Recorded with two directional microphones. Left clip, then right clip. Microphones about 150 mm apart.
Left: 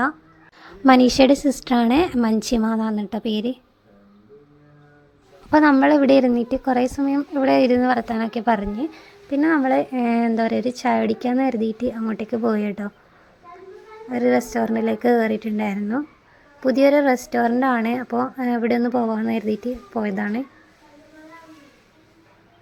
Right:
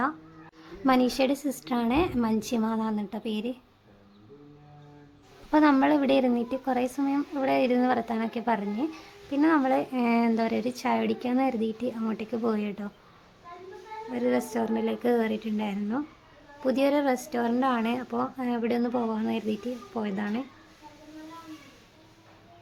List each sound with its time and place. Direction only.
0.6 s a woman's voice: 45° left (ahead or behind)
5.5 s a woman's voice: 40° left (ahead or behind)
14.1 s speech: 40° left (ahead or behind)